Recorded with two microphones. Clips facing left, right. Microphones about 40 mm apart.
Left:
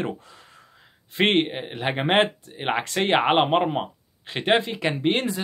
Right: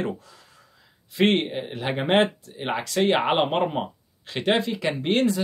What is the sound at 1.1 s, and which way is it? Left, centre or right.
Speech, left.